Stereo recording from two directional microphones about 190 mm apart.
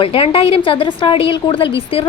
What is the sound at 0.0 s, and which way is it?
A woman's voice, 30° left (ahead or behind).